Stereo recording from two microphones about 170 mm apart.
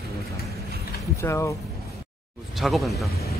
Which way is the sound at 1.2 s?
15° left (ahead or behind).